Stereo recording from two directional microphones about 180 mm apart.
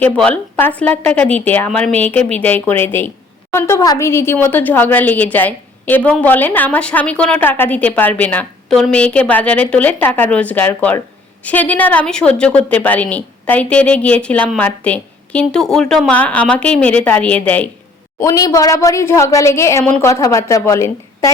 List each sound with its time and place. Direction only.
0.0 s a woman's voice: 10° left (ahead or behind)